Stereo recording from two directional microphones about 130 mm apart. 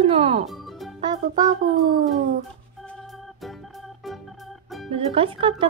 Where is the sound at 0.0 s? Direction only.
45° right (ahead or behind).